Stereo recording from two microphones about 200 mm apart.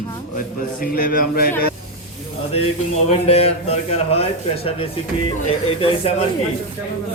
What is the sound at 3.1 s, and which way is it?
A man's voice, 30° left (ahead or behind).